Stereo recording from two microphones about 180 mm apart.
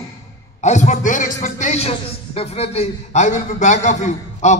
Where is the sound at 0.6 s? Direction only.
40° left (ahead or behind).